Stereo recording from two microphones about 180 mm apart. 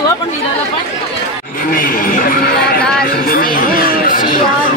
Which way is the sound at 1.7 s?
50° left (ahead or behind).